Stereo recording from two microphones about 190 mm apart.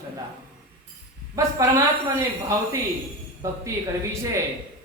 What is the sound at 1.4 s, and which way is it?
Speech, 15° right (ahead or behind).